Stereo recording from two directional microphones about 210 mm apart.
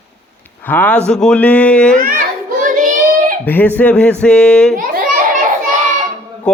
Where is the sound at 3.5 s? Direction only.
10° left (ahead or behind).